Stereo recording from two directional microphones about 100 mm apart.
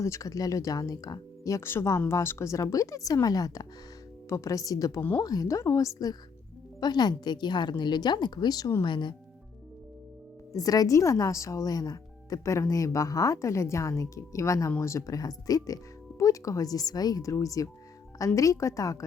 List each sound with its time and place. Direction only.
0.0 s a woman's voice: 30° left (ahead or behind); by 9.1 s 50° left (ahead or behind)
10.5 s speech: 40° left (ahead or behind)